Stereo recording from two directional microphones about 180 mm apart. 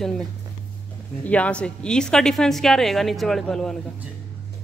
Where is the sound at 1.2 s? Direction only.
5° left (ahead or behind).